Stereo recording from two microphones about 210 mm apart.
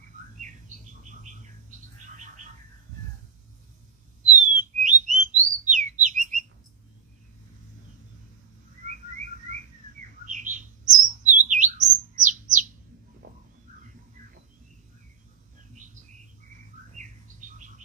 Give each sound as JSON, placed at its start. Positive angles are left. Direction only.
{"t": 0.4, "sound": "bird", "side_deg": -35}
{"t": 4.3, "sound": "bird", "side_deg": -35}
{"t": 10.2, "sound": "bird", "side_deg": -35}
{"t": 13.2, "sound": "a sound", "side_deg": -40}
{"t": 15.7, "sound": "bird", "side_deg": -35}